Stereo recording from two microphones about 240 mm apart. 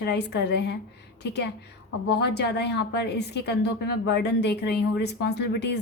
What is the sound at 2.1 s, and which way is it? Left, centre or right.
A woman's voice, left.